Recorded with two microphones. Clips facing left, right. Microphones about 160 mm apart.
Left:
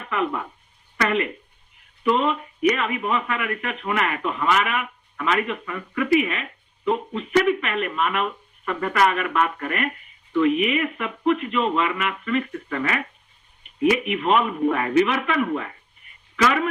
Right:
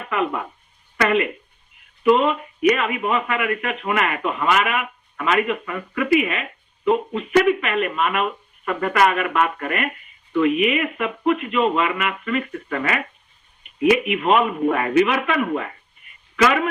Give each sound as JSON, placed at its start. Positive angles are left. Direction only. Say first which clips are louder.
{"t": 0.0, "sound": "a sound", "louder": "right 2 dB", "side_deg": -65}
{"t": 1.0, "sound": "a man's voice", "louder": "right 4 dB", "side_deg": -70}
{"t": 14.1, "sound": "a man's voice", "louder": "right 2 dB", "side_deg": -60}